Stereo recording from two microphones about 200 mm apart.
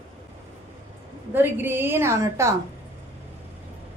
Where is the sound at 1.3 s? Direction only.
10° right (ahead or behind).